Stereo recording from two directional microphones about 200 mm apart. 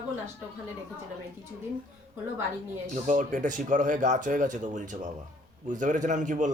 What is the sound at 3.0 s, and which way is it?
Speech, 40° right (ahead or behind).